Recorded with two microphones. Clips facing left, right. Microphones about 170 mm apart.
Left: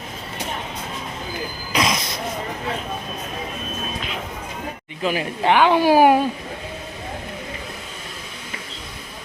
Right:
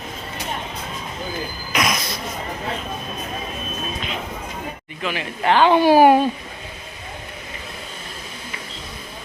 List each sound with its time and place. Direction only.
1.7 s a sound: 25° left (ahead or behind)
5.0 s speech: 35° left (ahead or behind)
5.4 s speech: 15° left (ahead or behind)